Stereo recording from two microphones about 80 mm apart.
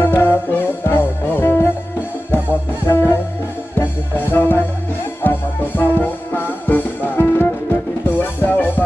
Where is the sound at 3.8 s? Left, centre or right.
Left.